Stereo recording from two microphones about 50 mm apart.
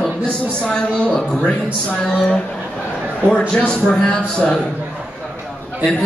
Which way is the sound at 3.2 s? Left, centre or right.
Centre.